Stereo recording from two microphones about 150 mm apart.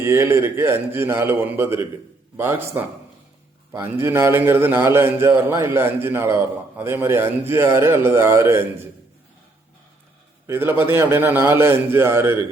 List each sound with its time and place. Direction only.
0.0 s a man's voice: 20° right (ahead or behind)
10.4 s a man's voice: 15° right (ahead or behind)